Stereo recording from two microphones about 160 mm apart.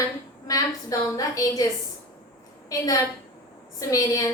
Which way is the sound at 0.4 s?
20° left (ahead or behind).